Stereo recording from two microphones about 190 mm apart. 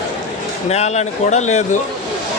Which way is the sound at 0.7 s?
35° left (ahead or behind).